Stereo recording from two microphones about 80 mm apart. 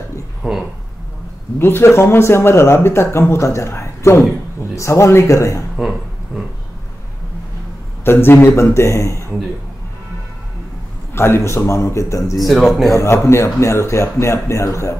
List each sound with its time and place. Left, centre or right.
0.4 s a sound: centre
1.6 s speech: left
5.8 s a sound: centre
8.0 s speech: left
11.1 s speech: left
12.4 s speech: centre
12.9 s speech: left